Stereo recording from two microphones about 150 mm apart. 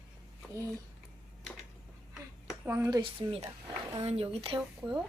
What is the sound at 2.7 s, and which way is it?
Speech, 15° right (ahead or behind).